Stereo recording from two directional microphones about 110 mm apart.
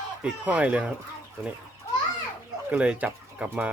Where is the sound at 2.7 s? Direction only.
10° right (ahead or behind).